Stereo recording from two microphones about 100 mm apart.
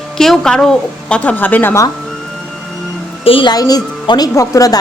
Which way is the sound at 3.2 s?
65° left (ahead or behind).